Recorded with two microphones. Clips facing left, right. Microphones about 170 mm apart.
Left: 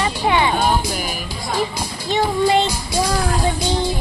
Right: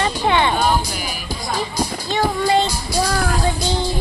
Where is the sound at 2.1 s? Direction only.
20° left (ahead or behind).